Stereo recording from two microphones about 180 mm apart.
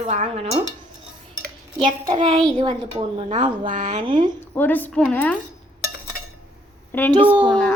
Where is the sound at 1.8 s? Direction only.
25° right (ahead or behind); by 3.9 s 45° right (ahead or behind).